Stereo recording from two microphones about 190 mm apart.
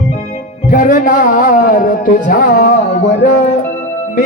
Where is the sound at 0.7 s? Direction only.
45° left (ahead or behind).